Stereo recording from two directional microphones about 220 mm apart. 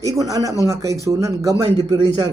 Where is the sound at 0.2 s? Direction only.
15° right (ahead or behind).